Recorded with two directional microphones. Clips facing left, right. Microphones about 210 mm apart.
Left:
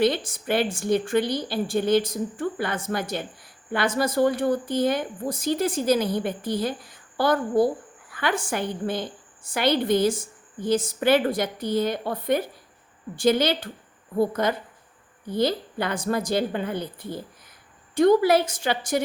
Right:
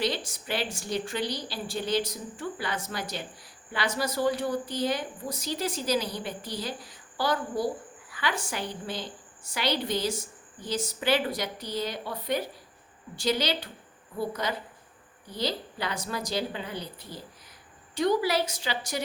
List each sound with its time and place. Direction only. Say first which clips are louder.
0.0 s a woman's voice: left 8 dB; 55° left (ahead or behind)